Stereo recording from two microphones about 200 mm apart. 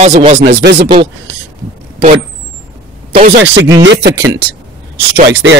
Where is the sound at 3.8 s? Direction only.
55° right (ahead or behind).